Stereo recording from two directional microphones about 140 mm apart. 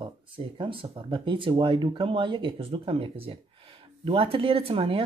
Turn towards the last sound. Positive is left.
turn(degrees=-40)  # may be behind; listen again after turning